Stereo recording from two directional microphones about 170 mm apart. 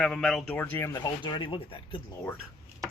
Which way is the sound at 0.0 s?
Centre (ahead or behind).